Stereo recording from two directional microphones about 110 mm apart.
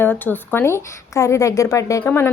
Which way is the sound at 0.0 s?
20° left (ahead or behind).